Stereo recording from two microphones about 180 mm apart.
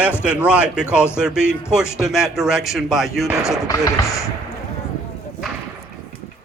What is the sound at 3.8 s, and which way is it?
Speech, 15° left (ahead or behind).